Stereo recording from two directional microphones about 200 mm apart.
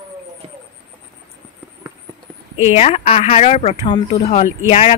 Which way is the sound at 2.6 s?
35° left (ahead or behind).